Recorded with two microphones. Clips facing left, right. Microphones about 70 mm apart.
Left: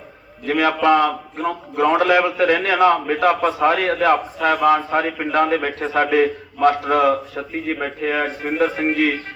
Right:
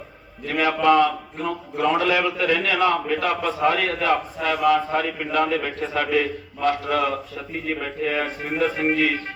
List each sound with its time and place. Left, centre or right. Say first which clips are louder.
0.6 s a man's voice: left 1 dB; left